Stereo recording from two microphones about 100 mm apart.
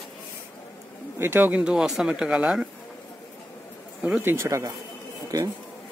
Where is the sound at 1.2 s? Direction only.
20° right (ahead or behind).